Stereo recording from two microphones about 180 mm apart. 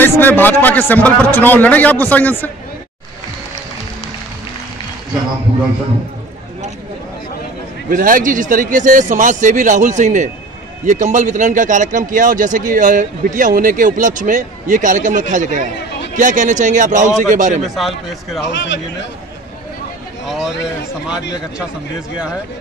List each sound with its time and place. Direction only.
0.0 s a man's voice: 10° left (ahead or behind)
7.9 s a man's voice: 50° right (ahead or behind)
17.6 s speech: centre (ahead or behind)
18.5 s speech: 80° left